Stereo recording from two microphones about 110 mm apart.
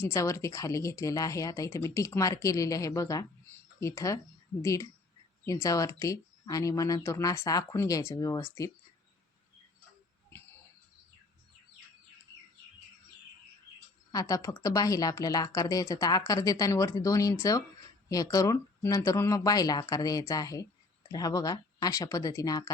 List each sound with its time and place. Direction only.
0.0 s a woman's voice: 25° left (ahead or behind)
14.1 s a woman's voice: 35° left (ahead or behind)